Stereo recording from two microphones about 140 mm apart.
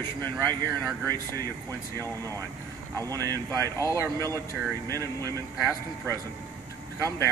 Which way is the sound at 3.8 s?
20° left (ahead or behind).